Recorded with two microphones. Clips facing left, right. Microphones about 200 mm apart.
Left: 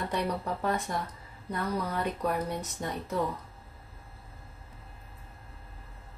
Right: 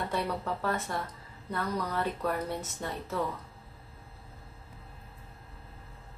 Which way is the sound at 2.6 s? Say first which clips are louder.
Left 2 dB; 15° left (ahead or behind).